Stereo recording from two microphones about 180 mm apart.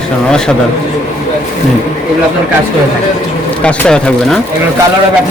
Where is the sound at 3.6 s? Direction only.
5° left (ahead or behind).